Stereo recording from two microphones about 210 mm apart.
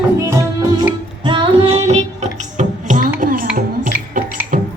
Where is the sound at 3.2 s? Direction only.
40° right (ahead or behind).